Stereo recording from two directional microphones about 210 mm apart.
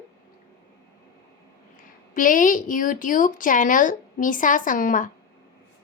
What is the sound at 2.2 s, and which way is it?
A woman's voice, 40° left (ahead or behind).